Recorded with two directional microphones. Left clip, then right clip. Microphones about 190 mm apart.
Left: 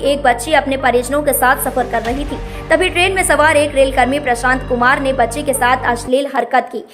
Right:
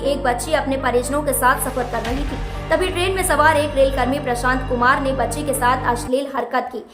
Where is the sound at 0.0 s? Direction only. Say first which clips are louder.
Left 6 dB; 25° left (ahead or behind).